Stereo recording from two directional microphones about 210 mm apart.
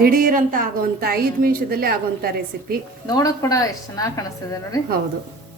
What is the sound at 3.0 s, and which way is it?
A woman's voice, 15° left (ahead or behind).